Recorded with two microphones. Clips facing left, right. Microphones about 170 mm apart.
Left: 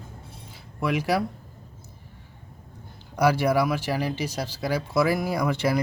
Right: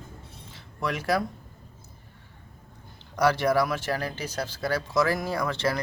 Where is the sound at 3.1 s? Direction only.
10° left (ahead or behind).